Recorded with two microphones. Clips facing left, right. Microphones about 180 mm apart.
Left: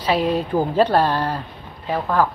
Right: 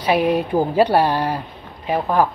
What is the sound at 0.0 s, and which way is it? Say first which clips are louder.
A woman's voice: right 2 dB; 15° right (ahead or behind).